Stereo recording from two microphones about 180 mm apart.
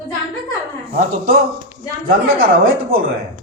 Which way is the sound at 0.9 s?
50° right (ahead or behind).